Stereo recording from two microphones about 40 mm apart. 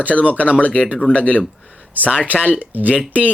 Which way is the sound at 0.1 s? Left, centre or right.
Left.